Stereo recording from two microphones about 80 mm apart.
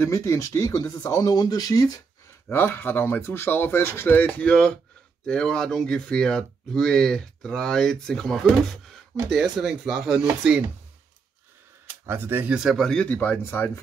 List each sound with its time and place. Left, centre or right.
0.0 s speech: left
2.5 s speech: left; by 10.6 s centre
12.1 s speech: right
12.7 s speech: centre
13.1 s speech: centre
13.4 s speech: left